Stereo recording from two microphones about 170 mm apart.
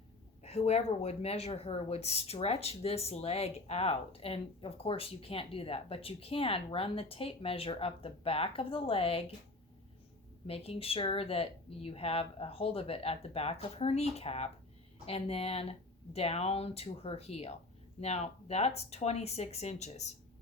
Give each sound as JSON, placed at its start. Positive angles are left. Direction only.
{"t": 0.4, "sound": "speech", "side_deg": 40}
{"t": 10.4, "sound": "speech", "side_deg": 35}